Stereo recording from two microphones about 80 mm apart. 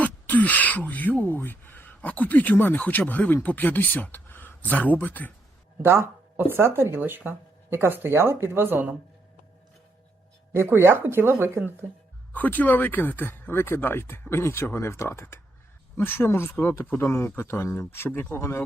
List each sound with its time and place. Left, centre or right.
0.0 s speech: centre
5.8 s speech: right
10.5 s speech: right
12.3 s speech: left